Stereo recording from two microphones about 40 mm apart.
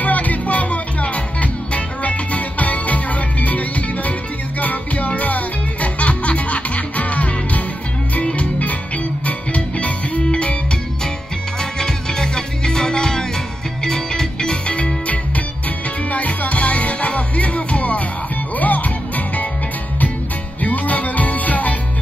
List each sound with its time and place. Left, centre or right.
0.0 s music: left
11.8 s music: centre
16.1 s music: left
20.6 s music: left